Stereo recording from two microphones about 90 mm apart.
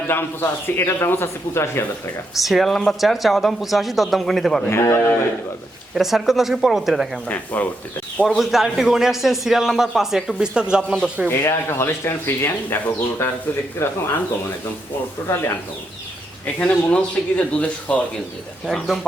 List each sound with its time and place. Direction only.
0.1 s speech: 25° left (ahead or behind)
2.4 s a man's voice: centre (ahead or behind)
4.7 s a man's voice: 30° left (ahead or behind)
5.9 s a man's voice: 5° right (ahead or behind)
7.3 s speech: 15° left (ahead or behind)
8.4 s a man's voice: 5° right (ahead or behind)
11.3 s speech: 30° left (ahead or behind)
16.6 s speech: 15° left (ahead or behind)
18.6 s a man's voice: centre (ahead or behind)